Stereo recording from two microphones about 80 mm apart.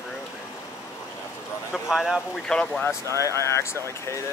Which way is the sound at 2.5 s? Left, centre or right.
Centre.